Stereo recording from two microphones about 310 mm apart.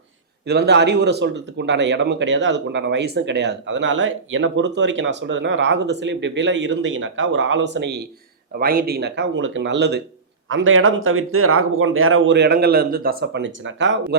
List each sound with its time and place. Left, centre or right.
0.4 s speech: right